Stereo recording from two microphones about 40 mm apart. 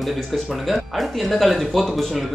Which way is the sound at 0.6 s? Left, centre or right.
Centre.